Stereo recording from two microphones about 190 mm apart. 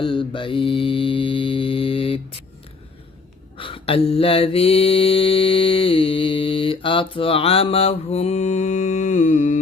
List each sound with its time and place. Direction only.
0.0 s mantra: 25° left (ahead or behind)
3.6 s mantra: 30° left (ahead or behind)